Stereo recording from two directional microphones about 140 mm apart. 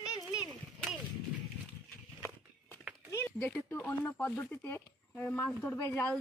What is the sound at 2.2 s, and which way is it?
Walk, 15° left (ahead or behind).